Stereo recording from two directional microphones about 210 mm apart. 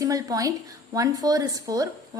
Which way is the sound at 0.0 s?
15° right (ahead or behind).